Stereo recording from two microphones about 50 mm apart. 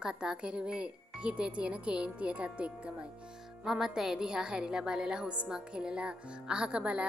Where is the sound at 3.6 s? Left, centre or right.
Centre; by 7.0 s right.